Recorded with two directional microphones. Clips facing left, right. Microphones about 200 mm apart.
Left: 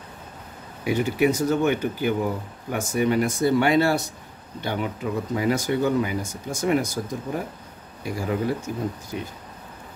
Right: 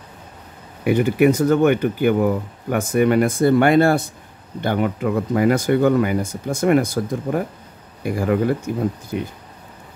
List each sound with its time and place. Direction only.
0.8 s speech: 60° right (ahead or behind)